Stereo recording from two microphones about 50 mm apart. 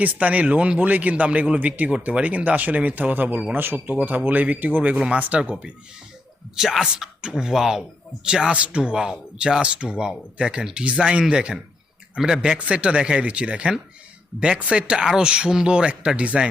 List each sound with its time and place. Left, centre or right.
0.0 s speech: right
6.6 s speech: centre; by 16.5 s right